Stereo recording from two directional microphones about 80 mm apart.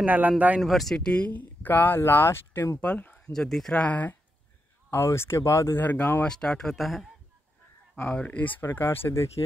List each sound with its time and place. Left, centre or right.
0.0 s speech: right
0.6 s speech: centre; by 2.8 s left
2.8 s speech: centre
3.3 s speech: centre
3.8 s speech: centre
4.9 s speech: left
5.8 s speech: left
6.2 s speech: centre
7.9 s speech: centre